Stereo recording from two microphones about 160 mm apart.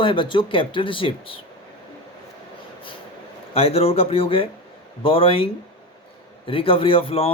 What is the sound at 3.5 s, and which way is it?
Speech, 40° left (ahead or behind).